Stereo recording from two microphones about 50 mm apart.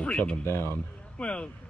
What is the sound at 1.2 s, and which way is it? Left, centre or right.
Speech, left.